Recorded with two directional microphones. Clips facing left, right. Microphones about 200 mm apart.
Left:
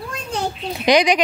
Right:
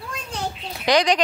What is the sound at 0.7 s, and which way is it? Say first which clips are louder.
Speech: left 3 dB; 15° left (ahead or behind).